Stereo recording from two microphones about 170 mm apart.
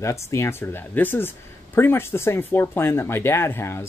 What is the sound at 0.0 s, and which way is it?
Speech, 15° left (ahead or behind).